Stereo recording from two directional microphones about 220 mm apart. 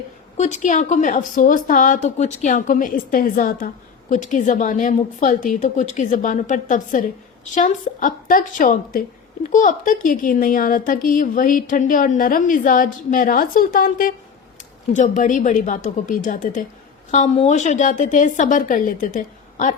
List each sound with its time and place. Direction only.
0.3 s a woman's voice: 30° left (ahead or behind)